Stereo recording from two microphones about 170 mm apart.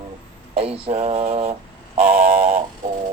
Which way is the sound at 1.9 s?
55° right (ahead or behind).